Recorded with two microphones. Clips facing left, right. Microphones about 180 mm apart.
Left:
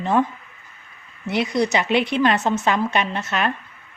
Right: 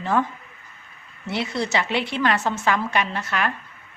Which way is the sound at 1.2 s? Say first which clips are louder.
Left 5 dB; 15° left (ahead or behind).